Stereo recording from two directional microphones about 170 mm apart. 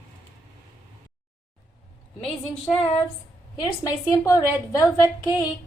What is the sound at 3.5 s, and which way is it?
A woman's voice, 20° left (ahead or behind).